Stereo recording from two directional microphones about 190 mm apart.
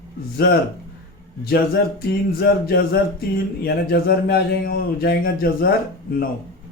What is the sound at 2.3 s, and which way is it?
Speech, 55° left (ahead or behind).